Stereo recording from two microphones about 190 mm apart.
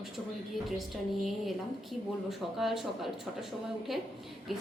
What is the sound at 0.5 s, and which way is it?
A woman's voice, centre (ahead or behind).